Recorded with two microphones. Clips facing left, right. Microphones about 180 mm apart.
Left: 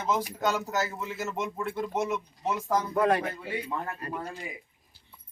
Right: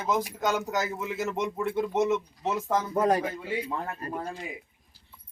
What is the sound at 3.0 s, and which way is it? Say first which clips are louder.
Speech: right 1 dB; 40° right (ahead or behind).